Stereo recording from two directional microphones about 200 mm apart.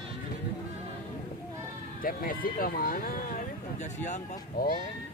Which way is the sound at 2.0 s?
45° left (ahead or behind).